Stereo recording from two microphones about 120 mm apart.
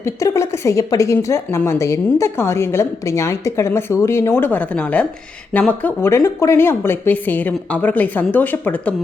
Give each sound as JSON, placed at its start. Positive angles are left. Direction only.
{"t": 0.0, "sound": "a woman's voice", "side_deg": 25}